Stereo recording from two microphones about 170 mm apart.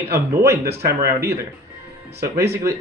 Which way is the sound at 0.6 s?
70° right (ahead or behind).